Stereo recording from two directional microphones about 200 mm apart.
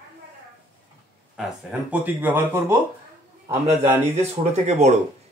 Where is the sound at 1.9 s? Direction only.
10° right (ahead or behind).